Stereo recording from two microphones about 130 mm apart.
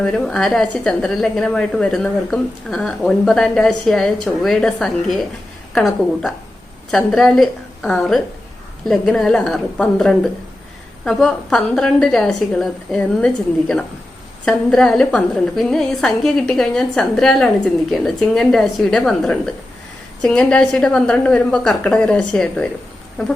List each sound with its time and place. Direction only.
0.0 s a woman's voice: 5° left (ahead or behind)